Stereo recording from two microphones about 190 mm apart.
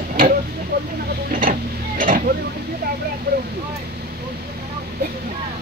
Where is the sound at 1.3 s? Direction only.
45° right (ahead or behind).